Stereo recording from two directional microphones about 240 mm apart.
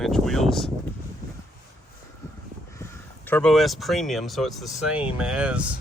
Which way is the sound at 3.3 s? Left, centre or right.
Centre.